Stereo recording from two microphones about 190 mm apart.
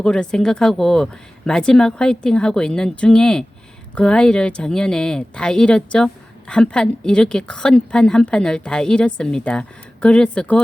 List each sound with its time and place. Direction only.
0.0 s a woman's voice: 5° left (ahead or behind)